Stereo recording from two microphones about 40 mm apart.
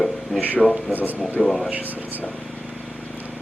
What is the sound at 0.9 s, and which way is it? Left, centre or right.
A man's voice, right.